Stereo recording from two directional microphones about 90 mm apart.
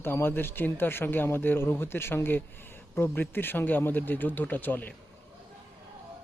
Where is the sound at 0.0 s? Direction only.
25° left (ahead or behind).